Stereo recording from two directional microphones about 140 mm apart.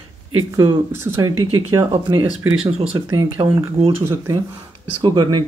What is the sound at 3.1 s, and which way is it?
Speech, 25° right (ahead or behind).